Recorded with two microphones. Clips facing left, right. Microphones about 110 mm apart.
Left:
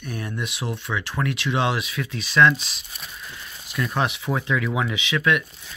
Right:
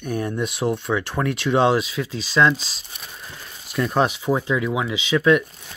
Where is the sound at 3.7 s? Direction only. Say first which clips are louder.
Right 4 dB; 35° right (ahead or behind).